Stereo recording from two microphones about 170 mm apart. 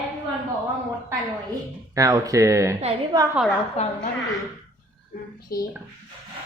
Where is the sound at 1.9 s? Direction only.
20° right (ahead or behind).